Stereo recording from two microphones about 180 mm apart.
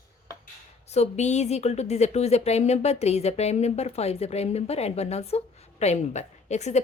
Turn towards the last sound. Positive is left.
turn(degrees=40)  # may be behind; listen again after turning